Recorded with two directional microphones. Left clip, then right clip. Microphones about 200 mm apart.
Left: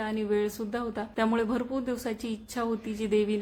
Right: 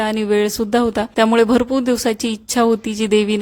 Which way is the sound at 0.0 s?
50° right (ahead or behind).